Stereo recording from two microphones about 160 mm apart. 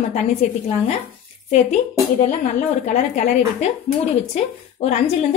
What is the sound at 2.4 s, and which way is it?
A woman's voice, 50° left (ahead or behind).